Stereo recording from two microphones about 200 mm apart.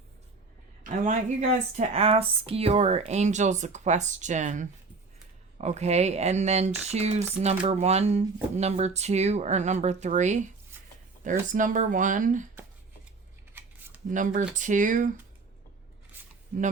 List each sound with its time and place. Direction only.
0.9 s speech: 40° right (ahead or behind)
13.5 s scissors: 10° right (ahead or behind)
14.1 s speech: 40° right (ahead or behind)
16.1 s single-lens reflex camera: 10° right (ahead or behind)